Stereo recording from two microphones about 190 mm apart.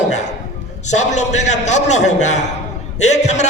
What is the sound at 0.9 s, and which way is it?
A man's voice, 35° left (ahead or behind).